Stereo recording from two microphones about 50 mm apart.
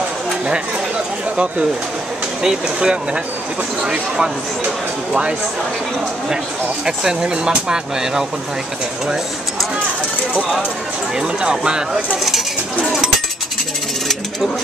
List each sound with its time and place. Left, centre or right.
2.4 s speech: centre
7.0 s speech: centre
11.1 s speech: centre
12.8 s chink: centre